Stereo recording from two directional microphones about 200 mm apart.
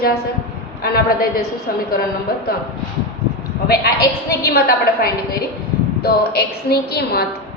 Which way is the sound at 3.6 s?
50° left (ahead or behind).